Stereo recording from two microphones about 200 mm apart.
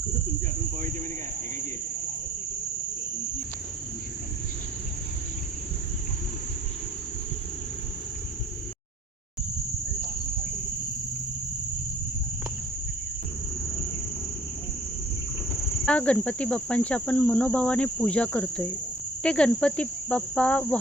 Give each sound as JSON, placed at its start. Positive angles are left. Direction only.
{"t": 15.9, "sound": "insect", "side_deg": 5}